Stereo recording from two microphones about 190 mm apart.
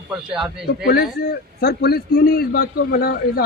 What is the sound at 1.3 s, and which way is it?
A man's voice, 55° left (ahead or behind).